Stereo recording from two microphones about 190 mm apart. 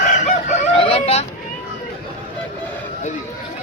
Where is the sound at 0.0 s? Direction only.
40° left (ahead or behind).